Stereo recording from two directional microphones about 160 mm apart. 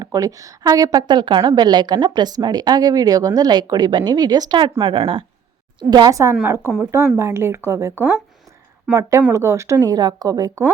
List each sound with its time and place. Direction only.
0.0 s a woman's voice: 20° right (ahead or behind)
5.9 s a woman's voice: 25° right (ahead or behind)